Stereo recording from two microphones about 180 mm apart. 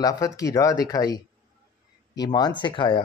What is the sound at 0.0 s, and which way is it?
Speech, 20° left (ahead or behind).